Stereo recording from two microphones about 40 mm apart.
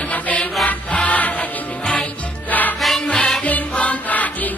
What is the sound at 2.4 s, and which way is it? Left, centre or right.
Music, left.